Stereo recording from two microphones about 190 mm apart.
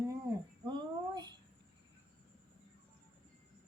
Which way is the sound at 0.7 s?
20° right (ahead or behind).